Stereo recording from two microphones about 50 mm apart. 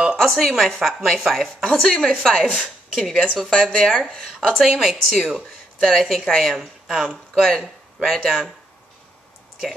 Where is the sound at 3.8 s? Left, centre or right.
Centre.